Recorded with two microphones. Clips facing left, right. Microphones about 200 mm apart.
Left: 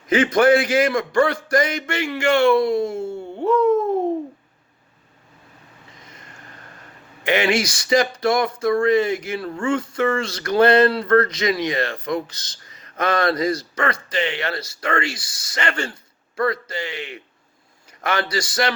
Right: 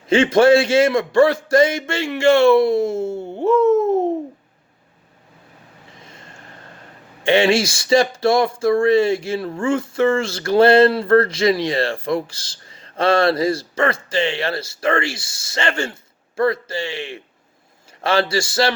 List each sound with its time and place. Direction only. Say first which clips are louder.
0.1 s speech: right 3 dB; 25° right (ahead or behind)
6.0 s a sound: right 3 dB; 25° right (ahead or behind)
7.2 s speech: right 4 dB; 30° right (ahead or behind)